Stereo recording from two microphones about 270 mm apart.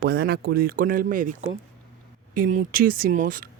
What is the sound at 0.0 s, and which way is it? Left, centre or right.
Speech, right.